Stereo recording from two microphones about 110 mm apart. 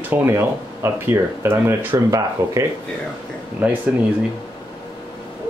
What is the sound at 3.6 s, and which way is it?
Speech, 15° right (ahead or behind).